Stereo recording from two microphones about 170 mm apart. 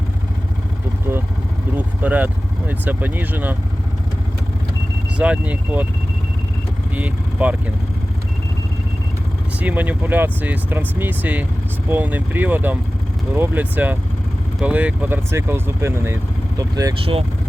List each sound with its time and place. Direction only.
1.7 s speech: 10° right (ahead or behind)
5.1 s speech: 5° right (ahead or behind)
6.9 s speech: 10° right (ahead or behind)
9.6 s speech: 10° right (ahead or behind)
17.0 s speech: 30° right (ahead or behind)